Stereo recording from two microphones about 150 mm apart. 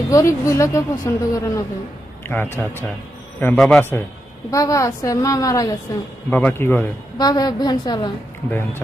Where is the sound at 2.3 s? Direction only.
10° left (ahead or behind).